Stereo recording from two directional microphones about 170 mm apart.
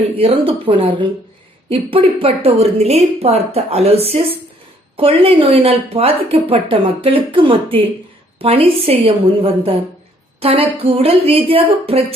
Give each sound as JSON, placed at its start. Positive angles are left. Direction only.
{"t": 0.2, "sound": "speech", "side_deg": -35}